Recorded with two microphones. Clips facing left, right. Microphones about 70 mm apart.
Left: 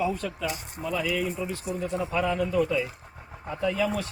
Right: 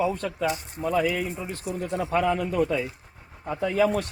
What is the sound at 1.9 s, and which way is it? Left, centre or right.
A man's voice, right.